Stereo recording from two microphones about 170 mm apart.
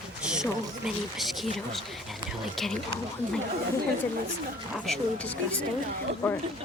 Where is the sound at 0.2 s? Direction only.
5° right (ahead or behind).